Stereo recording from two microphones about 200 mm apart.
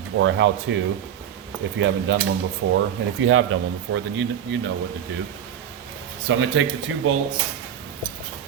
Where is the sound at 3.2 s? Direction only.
90° right.